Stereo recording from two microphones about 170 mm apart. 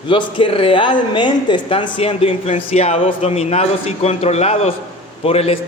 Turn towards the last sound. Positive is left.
turn(degrees=35)  # may be behind; listen again after turning